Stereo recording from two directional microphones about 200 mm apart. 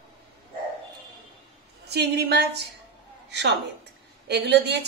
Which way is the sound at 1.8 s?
55° right (ahead or behind).